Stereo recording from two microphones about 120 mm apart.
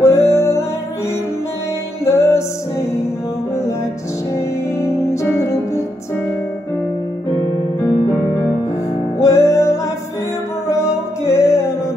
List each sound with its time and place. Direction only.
0.0 s music: 25° left (ahead or behind)
2.0 s music: 25° left (ahead or behind)
4.4 s music: 25° left (ahead or behind)
9.2 s music: 25° left (ahead or behind)